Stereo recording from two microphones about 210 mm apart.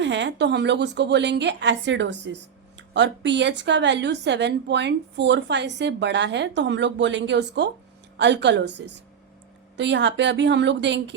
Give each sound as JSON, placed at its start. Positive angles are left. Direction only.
{"t": 0.0, "sound": "a woman's voice", "side_deg": -60}